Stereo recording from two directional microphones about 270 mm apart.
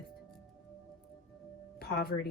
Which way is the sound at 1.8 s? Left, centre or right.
Left.